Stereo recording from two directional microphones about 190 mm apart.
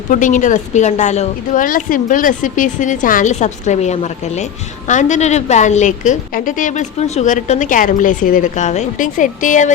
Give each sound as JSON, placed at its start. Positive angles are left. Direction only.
{"t": 0.1, "sound": "a woman's voice", "side_deg": 40}